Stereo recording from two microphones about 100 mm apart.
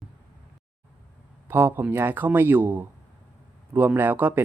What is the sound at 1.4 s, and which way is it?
Speech, 20° right (ahead or behind).